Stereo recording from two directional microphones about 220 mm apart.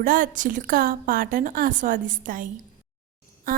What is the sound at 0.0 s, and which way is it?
A woman's voice, 40° right (ahead or behind).